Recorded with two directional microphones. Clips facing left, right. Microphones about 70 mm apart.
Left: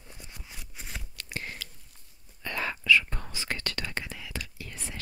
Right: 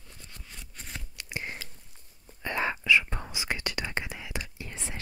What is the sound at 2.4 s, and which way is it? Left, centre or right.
Whispering, right.